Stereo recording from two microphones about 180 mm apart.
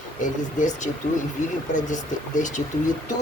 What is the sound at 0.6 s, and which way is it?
Speech, 45° left (ahead or behind).